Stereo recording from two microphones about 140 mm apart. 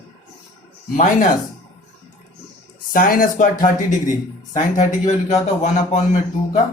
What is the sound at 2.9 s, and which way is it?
A man's voice, 85° left.